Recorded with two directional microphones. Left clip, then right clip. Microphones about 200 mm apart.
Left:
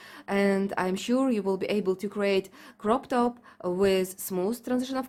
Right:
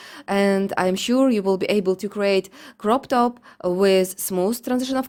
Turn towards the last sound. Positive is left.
turn(degrees=-30)  # may be behind; listen again after turning